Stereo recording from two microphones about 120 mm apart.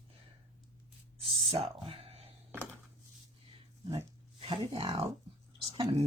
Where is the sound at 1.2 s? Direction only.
55° right (ahead or behind).